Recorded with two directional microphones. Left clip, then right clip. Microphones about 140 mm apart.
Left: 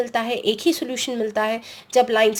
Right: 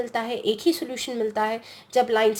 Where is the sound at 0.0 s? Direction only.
30° left (ahead or behind).